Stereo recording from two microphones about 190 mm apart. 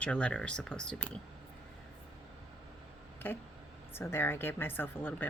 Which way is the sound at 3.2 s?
10° left (ahead or behind).